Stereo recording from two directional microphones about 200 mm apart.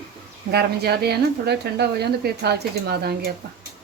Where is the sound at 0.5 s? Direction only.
55° right (ahead or behind).